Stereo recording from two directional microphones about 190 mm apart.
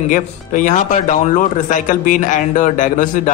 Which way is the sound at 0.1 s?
40° left (ahead or behind).